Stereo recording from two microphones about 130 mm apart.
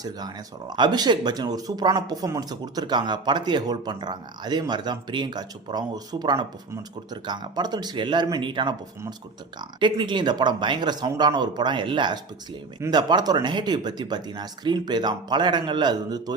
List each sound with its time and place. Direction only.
0.0 s speech: 30° right (ahead or behind)